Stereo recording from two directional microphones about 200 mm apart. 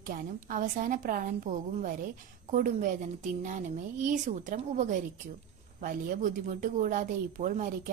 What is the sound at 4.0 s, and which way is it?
Speech, 40° right (ahead or behind).